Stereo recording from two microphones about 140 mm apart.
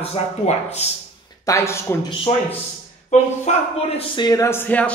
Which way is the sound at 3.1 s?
55° left (ahead or behind).